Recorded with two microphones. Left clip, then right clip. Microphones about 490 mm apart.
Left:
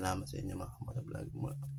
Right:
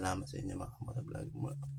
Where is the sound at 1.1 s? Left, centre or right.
Left.